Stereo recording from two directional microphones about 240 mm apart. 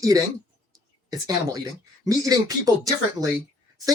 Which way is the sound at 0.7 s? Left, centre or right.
Centre.